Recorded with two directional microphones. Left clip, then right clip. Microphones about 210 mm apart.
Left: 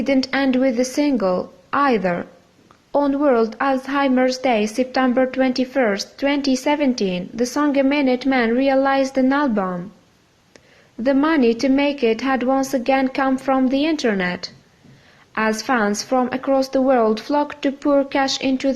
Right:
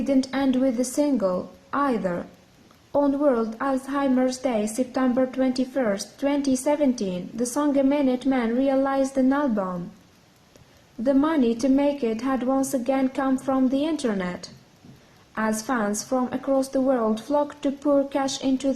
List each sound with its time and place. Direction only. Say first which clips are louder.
0.0 s a woman's voice: left 5 dB; 30° left (ahead or behind)
11.0 s a woman's voice: left 5 dB; 30° left (ahead or behind)